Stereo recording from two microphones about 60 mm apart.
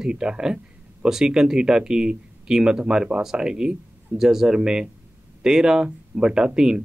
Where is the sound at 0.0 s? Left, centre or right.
Centre.